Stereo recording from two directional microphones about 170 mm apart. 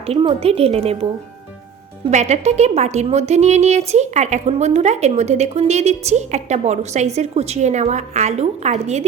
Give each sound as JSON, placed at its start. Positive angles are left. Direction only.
{"t": 0.0, "sound": "a woman's voice", "side_deg": -35}
{"t": 2.0, "sound": "a woman's voice", "side_deg": -40}